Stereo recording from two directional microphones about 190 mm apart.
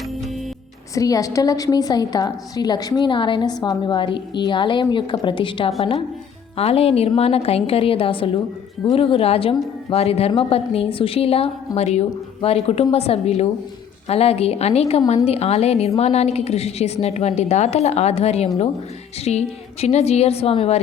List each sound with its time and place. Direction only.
0.9 s a woman's voice: 20° left (ahead or behind)